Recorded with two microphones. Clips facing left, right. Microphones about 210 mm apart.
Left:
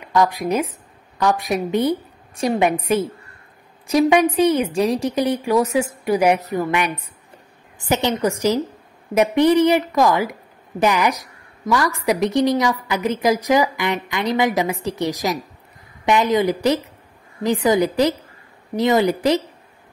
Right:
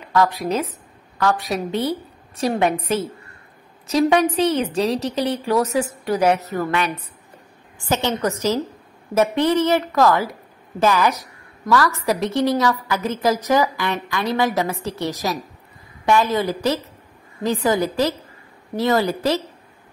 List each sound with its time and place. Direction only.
0.1 s a woman's voice: 15° left (ahead or behind)
3.8 s a woman's voice: 10° left (ahead or behind)